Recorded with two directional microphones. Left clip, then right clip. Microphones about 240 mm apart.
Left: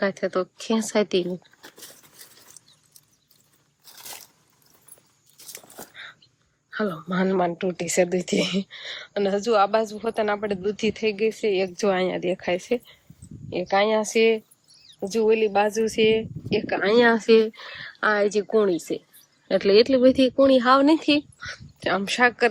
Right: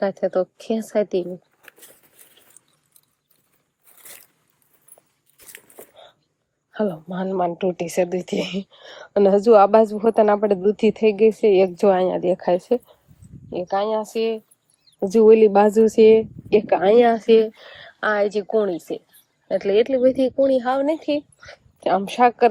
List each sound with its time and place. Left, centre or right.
0.0 s speech: centre
6.7 s speech: centre
9.0 s a woman's voice: centre
15.0 s a woman's voice: right
17.0 s speech: centre
21.4 s speech: centre